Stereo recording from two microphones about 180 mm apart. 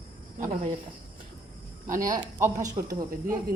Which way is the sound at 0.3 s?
45° right (ahead or behind).